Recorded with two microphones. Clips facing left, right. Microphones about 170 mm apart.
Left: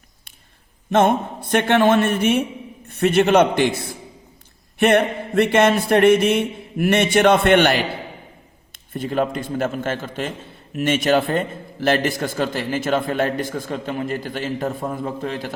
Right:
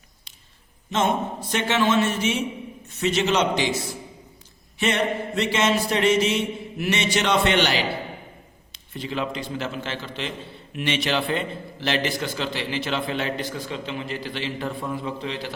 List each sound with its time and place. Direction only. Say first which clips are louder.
0.9 s a man's voice: left 6 dB; 55° left (ahead or behind)